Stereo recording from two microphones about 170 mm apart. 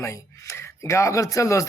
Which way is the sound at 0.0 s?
15° left (ahead or behind).